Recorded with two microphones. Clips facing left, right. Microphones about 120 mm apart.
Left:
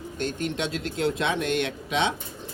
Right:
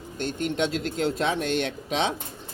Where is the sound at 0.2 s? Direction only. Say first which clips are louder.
Right 1 dB; 40° left (ahead or behind).